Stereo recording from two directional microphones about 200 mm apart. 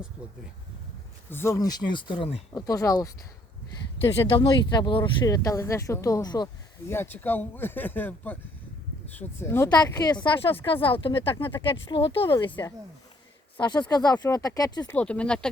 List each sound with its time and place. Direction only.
1.3 s speech: 10° left (ahead or behind)
4.3 s speech: 25° left (ahead or behind)
14.9 s speech: 5° left (ahead or behind)